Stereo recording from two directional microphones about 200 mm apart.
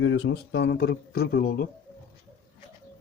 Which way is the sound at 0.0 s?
65° left (ahead or behind).